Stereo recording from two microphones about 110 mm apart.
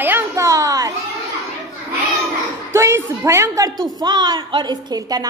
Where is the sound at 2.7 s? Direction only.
25° right (ahead or behind).